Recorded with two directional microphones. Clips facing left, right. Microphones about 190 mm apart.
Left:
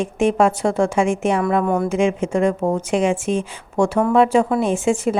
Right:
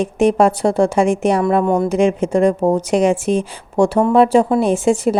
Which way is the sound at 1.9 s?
35° right (ahead or behind).